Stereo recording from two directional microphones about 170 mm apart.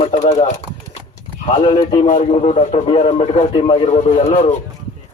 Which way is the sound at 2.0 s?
45° left (ahead or behind).